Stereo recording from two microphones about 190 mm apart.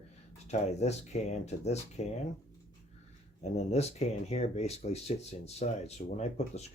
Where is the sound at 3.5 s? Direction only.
35° left (ahead or behind).